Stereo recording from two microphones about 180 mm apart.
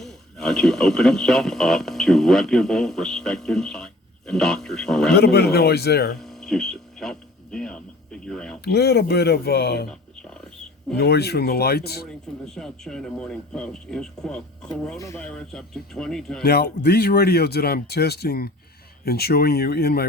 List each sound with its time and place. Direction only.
0.0 s speech: centre (ahead or behind)
5.1 s speech: 65° left (ahead or behind)
6.1 s speech: centre (ahead or behind)
8.6 s speech: 65° left (ahead or behind)
10.9 s speech: 65° left (ahead or behind)
12.0 s speech: centre (ahead or behind)
14.9 s speech: 15° left (ahead or behind)
15.2 s speech: 5° left (ahead or behind)
16.4 s speech: 65° left (ahead or behind)